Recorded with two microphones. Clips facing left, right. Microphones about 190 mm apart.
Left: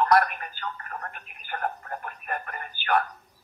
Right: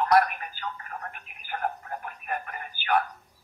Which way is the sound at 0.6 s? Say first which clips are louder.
Left 1 dB; 55° left (ahead or behind).